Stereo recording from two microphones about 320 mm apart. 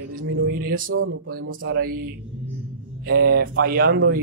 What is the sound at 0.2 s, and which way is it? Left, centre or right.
Speech, right.